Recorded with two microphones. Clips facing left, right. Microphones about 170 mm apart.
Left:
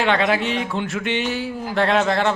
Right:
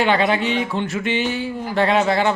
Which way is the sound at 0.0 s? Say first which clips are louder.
Right 1 dB; centre (ahead or behind).